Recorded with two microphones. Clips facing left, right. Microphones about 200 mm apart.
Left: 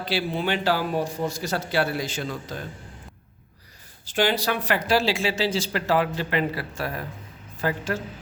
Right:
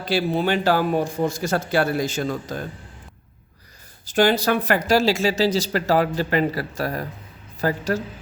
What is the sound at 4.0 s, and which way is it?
Speech, 45° right (ahead or behind).